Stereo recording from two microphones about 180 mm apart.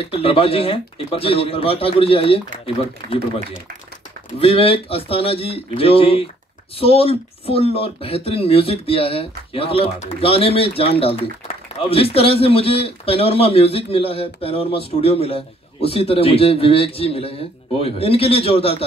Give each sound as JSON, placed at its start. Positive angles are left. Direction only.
{"t": 0.1, "sound": "a man's voice", "side_deg": 30}
{"t": 4.4, "sound": "a man's voice", "side_deg": 30}